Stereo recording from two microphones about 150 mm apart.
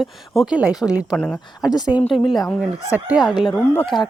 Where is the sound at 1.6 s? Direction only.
25° left (ahead or behind).